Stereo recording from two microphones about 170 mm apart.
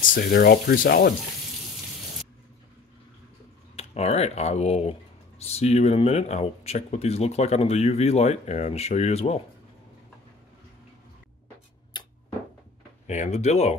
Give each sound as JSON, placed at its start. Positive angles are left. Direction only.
{"t": 0.0, "sound": "speech", "side_deg": 55}
{"t": 3.7, "sound": "speech", "side_deg": 40}
{"t": 11.9, "sound": "a sound", "side_deg": 25}
{"t": 13.0, "sound": "speech", "side_deg": 40}